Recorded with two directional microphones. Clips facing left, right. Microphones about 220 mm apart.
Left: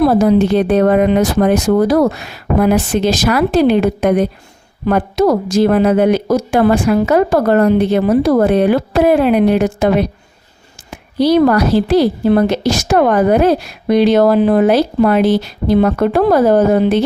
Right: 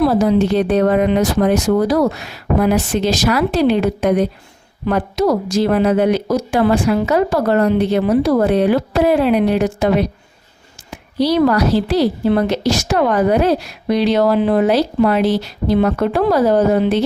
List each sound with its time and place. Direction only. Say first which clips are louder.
0.0 s speech: left 3 dB; 55° left (ahead or behind)
10.9 s speech: left 4 dB; 50° left (ahead or behind)